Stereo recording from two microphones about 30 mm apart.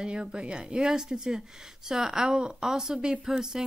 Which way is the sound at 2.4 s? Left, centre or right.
Right.